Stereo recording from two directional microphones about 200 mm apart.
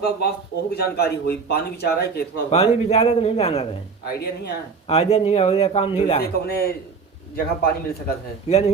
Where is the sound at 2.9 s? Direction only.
30° left (ahead or behind).